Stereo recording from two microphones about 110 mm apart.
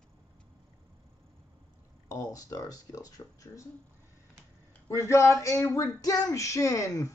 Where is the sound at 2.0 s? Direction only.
35° left (ahead or behind).